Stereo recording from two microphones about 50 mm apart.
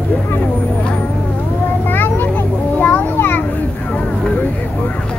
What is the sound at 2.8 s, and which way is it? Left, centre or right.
Children playing, left.